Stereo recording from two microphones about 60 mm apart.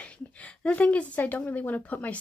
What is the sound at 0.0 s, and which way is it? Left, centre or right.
A woman's voice, left.